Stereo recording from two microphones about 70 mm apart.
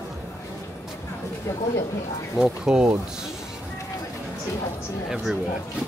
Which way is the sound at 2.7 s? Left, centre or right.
Centre.